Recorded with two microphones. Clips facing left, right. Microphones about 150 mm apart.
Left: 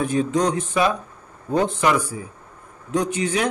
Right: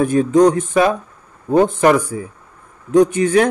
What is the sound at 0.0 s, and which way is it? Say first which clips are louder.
Speech: right 8 dB; 50° right (ahead or behind).